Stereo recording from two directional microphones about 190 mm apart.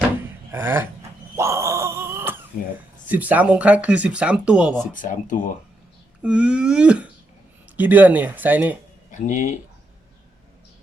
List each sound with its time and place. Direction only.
0.5 s speech: 10° right (ahead or behind)
1.4 s groan: 15° right (ahead or behind)
3.1 s speech: 10° right (ahead or behind)
4.9 s speech: 45° left (ahead or behind)
6.2 s speech: 5° right (ahead or behind)
9.1 s speech: 40° left (ahead or behind)